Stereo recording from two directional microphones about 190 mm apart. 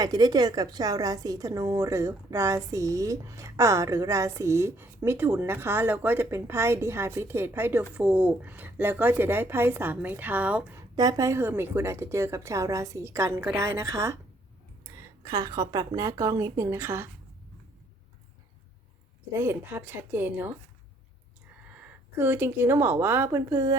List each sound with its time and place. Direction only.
0.0 s a woman's voice: 20° right (ahead or behind)
19.3 s a woman's voice: 15° right (ahead or behind)
21.7 s speech: 10° right (ahead or behind)